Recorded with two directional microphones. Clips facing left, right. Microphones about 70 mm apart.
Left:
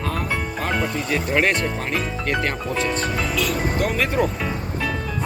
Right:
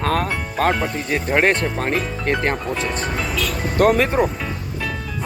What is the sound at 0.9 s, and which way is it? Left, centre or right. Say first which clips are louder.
Speech: right 1 dB; right.